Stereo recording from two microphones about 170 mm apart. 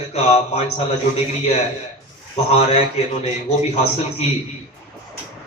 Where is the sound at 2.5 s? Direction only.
35° left (ahead or behind).